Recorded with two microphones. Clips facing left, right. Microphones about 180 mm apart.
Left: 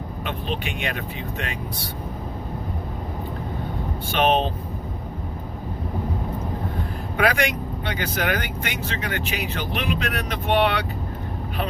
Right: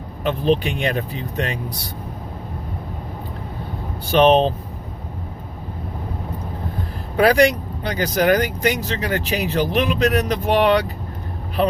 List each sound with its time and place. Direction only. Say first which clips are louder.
0.3 s speech: right 11 dB; 40° right (ahead or behind)
4.1 s speech: right 7 dB; 35° right (ahead or behind)
7.2 s speech: right 7 dB; 35° right (ahead or behind)